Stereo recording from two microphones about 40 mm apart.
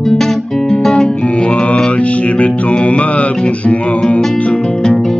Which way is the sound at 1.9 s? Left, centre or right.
Left.